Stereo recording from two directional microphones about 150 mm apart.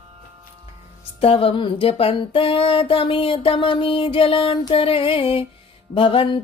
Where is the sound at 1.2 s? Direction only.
40° left (ahead or behind).